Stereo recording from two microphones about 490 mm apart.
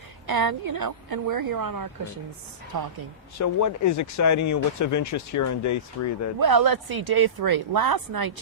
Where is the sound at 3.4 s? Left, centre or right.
Left.